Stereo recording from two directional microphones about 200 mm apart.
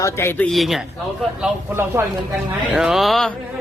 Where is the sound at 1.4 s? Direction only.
10° right (ahead or behind).